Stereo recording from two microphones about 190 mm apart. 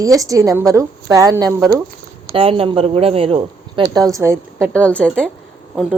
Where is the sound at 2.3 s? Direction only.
30° right (ahead or behind).